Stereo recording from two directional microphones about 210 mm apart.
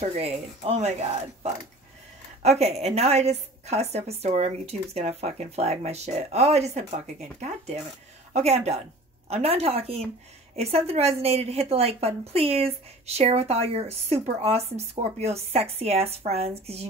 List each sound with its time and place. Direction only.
0.0 s a woman's voice: 30° right (ahead or behind)
2.4 s a woman's voice: 30° right (ahead or behind)